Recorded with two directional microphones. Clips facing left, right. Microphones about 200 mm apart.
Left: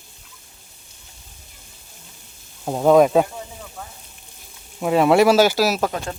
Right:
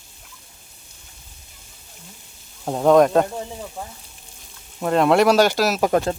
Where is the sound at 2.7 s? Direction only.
5° left (ahead or behind).